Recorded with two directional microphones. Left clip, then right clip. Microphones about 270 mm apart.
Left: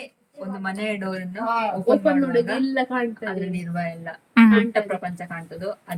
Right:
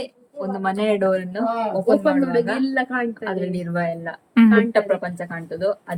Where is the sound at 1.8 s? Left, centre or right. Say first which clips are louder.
Right 1 dB; centre.